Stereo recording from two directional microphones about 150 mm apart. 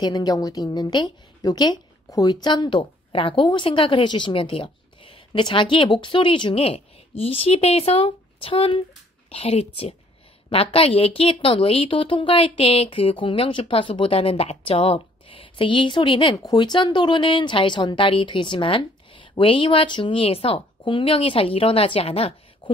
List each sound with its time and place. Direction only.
0.0 s a woman's voice: 25° left (ahead or behind); by 22.7 s 40° left (ahead or behind)